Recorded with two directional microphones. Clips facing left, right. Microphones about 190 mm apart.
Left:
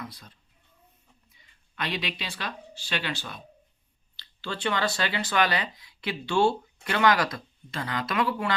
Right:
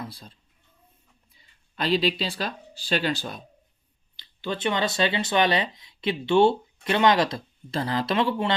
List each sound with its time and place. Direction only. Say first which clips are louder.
0.0 s speech: right 3 dB; 30° right (ahead or behind)
4.2 s speech: right 4 dB; 20° right (ahead or behind)